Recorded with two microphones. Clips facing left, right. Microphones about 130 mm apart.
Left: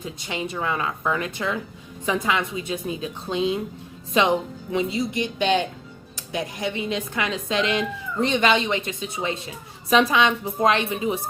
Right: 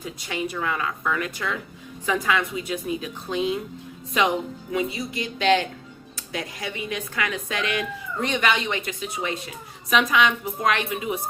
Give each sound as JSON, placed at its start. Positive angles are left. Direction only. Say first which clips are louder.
{"t": 0.0, "sound": "a woman's voice", "louder": "even", "side_deg": 25}